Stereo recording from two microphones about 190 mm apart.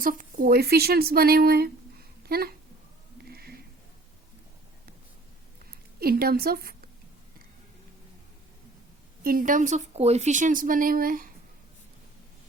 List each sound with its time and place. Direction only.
0.0 s a woman's voice: 45° right (ahead or behind)
3.2 s a sound: 55° right (ahead or behind)
6.0 s a woman's voice: 50° right (ahead or behind)
9.2 s a woman's voice: 50° right (ahead or behind)